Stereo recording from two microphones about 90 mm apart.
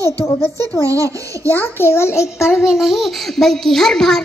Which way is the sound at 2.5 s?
5° right (ahead or behind).